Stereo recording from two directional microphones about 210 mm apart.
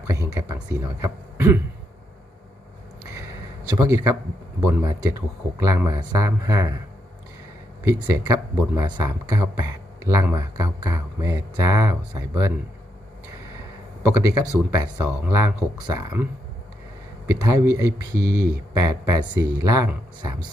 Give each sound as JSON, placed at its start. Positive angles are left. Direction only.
{"t": 0.1, "sound": "speech", "side_deg": -15}
{"t": 3.8, "sound": "speech", "side_deg": -10}
{"t": 7.9, "sound": "speech", "side_deg": -15}
{"t": 14.0, "sound": "speech", "side_deg": -15}
{"t": 17.4, "sound": "speech", "side_deg": -15}